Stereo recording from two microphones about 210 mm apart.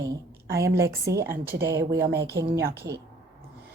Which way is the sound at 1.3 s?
45° right (ahead or behind).